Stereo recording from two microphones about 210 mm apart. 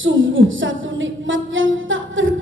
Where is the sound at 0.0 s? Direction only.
65° right (ahead or behind).